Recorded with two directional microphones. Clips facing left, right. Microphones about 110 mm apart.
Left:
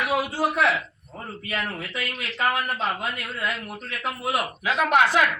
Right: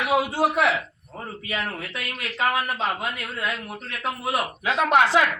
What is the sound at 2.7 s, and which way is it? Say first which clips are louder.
A man's voice: right 1 dB; centre (ahead or behind).